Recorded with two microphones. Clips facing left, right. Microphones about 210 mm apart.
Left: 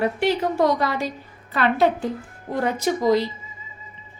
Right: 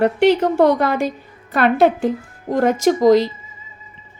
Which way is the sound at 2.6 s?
90° right.